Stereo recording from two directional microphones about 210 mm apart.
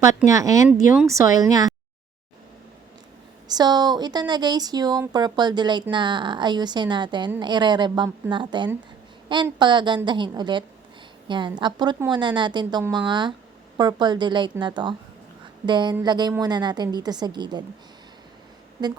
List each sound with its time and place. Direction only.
0.3 s speech: 15° right (ahead or behind)
3.5 s speech: 20° right (ahead or behind)